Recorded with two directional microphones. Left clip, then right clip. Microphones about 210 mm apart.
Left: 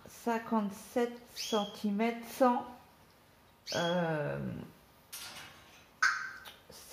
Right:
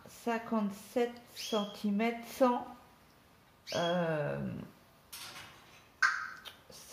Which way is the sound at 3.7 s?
15° left (ahead or behind).